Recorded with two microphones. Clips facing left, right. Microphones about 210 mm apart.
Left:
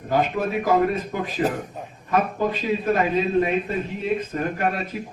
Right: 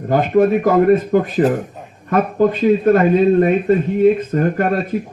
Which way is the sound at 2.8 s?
55° right (ahead or behind).